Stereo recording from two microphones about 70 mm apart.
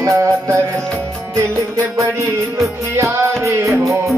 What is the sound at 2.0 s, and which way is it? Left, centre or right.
Music, right.